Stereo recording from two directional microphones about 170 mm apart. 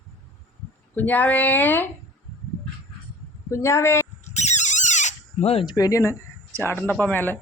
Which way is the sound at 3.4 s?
15° left (ahead or behind).